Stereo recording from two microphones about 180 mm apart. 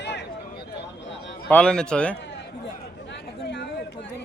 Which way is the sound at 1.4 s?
5° left (ahead or behind).